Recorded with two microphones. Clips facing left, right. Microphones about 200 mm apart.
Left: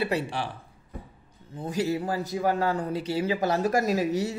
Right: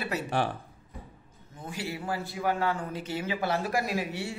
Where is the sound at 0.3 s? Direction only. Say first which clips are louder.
Right 4 dB; 50° right (ahead or behind).